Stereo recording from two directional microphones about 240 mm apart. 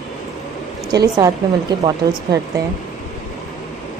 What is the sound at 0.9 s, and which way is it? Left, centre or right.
Speech, centre.